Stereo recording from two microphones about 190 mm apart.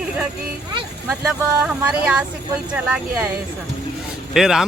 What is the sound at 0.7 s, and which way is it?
Speech, 15° right (ahead or behind).